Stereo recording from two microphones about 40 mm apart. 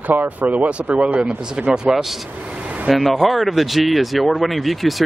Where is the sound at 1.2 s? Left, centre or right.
Centre.